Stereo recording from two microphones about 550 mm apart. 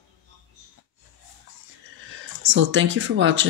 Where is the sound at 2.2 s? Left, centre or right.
Right.